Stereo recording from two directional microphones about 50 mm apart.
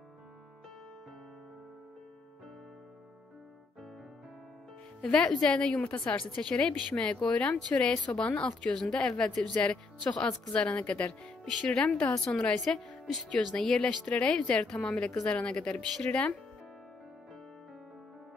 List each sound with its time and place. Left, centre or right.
5.0 s a woman's voice: left
5.8 s a woman's voice: left
7.7 s speech: left
8.2 s a woman's voice: centre
11.2 s speech: centre
11.8 s a woman's voice: left
13.0 s speech: centre
13.5 s a woman's voice: centre